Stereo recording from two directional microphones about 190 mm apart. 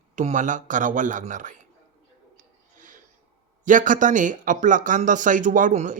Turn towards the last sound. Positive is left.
turn(degrees=-40)  # may be behind; listen again after turning